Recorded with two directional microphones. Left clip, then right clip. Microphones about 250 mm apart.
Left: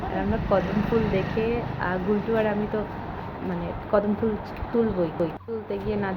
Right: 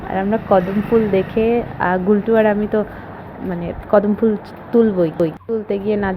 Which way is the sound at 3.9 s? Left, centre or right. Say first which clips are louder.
Right 9 dB; right.